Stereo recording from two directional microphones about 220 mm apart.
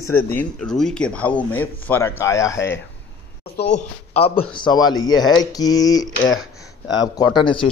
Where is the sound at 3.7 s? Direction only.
30° left (ahead or behind).